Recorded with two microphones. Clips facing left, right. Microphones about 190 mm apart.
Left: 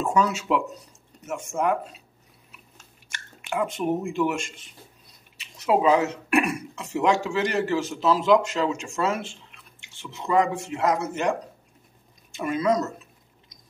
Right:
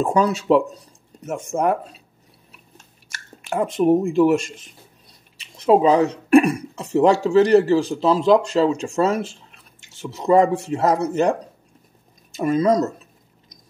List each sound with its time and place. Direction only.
0.0 s speech: 35° right (ahead or behind)
3.1 s speech: 40° right (ahead or behind)